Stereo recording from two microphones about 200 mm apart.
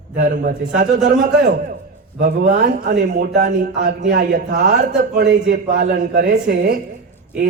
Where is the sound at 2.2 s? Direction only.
45° right (ahead or behind).